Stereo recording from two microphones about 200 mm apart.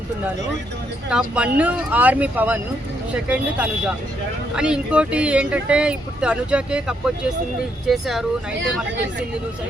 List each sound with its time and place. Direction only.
1.1 s speech: 5° right (ahead or behind)